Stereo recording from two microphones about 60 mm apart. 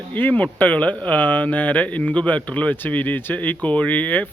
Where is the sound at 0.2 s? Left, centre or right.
Left.